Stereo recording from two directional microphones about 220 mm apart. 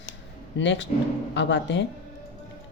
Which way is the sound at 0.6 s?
55° left (ahead or behind).